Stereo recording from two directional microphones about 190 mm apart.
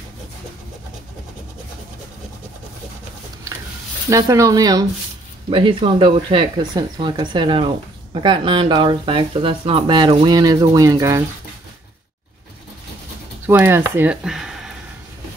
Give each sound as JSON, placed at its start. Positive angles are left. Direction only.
{"t": 4.1, "sound": "speech", "side_deg": -15}
{"t": 13.5, "sound": "speech", "side_deg": -10}